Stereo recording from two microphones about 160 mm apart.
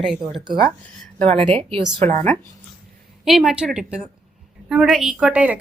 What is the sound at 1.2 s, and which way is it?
A woman's voice, 40° right (ahead or behind).